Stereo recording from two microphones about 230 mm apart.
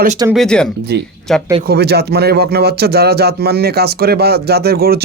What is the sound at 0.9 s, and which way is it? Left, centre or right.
Speech, right.